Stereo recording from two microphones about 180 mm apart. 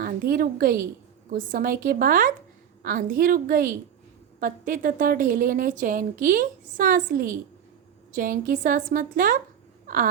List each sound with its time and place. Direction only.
0.0 s a woman's voice: 55° right (ahead or behind)
9.8 s baby cry: 50° right (ahead or behind)